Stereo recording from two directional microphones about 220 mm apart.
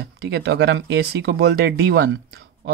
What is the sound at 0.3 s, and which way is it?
Speech, 50° right (ahead or behind).